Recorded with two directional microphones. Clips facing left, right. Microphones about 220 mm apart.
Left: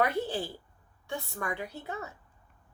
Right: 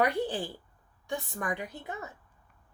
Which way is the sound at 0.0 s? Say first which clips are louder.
Right 1 dB; 15° right (ahead or behind).